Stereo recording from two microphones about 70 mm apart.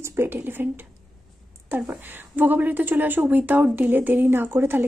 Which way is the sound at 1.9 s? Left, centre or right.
Right.